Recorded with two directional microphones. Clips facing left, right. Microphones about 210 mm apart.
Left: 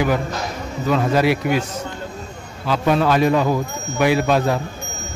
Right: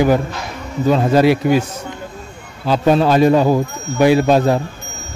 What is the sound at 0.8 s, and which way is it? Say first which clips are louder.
Speech: right 5 dB; 30° right (ahead or behind).